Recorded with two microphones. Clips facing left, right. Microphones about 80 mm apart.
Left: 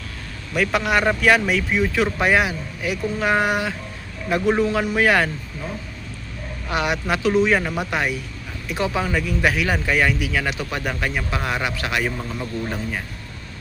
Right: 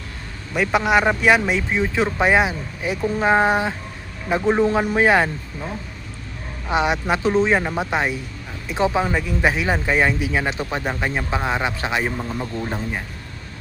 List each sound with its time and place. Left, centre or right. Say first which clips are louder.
0.5 s speech: right 2 dB; right
6.7 s speech: right 3 dB; right